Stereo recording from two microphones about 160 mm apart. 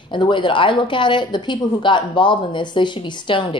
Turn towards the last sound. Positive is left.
turn(degrees=30)  # may be behind; listen again after turning